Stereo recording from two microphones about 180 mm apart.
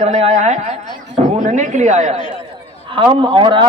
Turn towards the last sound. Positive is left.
turn(degrees=-30)  # may be behind; listen again after turning